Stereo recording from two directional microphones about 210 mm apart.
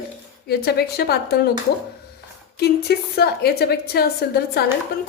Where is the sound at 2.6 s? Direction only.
50° left (ahead or behind).